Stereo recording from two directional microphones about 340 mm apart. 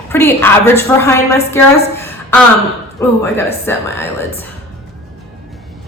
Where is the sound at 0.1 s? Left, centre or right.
Centre.